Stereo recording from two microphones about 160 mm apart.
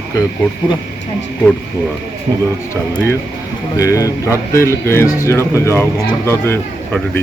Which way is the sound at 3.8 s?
20° left (ahead or behind).